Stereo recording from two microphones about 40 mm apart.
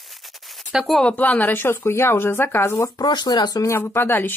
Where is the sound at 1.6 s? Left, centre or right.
Left.